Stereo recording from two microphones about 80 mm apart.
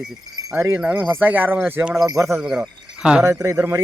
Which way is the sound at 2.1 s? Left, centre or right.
Right.